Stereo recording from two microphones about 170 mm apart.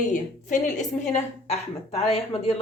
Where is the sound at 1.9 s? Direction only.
35° left (ahead or behind).